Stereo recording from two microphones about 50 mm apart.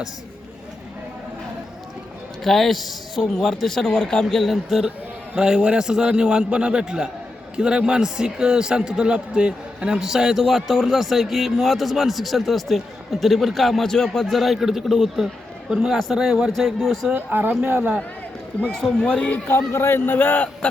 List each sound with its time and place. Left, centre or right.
2.4 s a man's voice: centre
4.3 s a man's voice: centre
5.3 s a man's voice: centre
10.4 s a man's voice: centre
14.3 s a man's voice: centre
17.3 s speech: right
18.7 s speech: centre
19.0 s speech: left
19.7 s a man's voice: left